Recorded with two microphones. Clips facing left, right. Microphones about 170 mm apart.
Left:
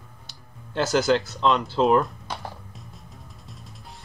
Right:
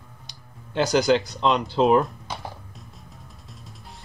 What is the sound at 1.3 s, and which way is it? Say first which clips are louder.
Speech: even; 20° right (ahead or behind).